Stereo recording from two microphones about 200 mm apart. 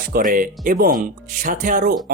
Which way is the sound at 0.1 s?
45° right (ahead or behind).